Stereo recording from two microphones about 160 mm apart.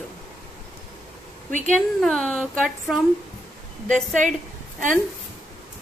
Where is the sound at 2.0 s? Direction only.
5° left (ahead or behind).